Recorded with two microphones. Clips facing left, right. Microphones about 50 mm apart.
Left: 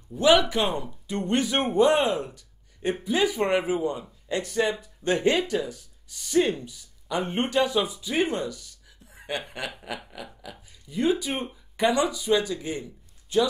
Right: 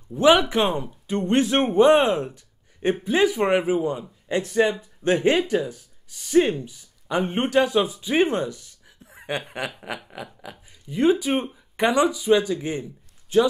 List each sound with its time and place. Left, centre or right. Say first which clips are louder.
0.1 s speech: right 3 dB; right